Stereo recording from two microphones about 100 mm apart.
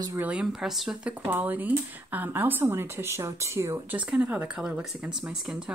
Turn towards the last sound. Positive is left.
turn(degrees=-5)  # may be behind; listen again after turning